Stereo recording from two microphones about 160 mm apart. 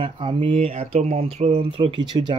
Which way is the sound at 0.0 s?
30° right (ahead or behind).